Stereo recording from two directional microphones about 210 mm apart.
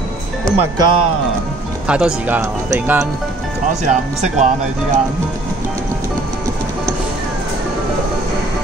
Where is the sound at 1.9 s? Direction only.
5° right (ahead or behind).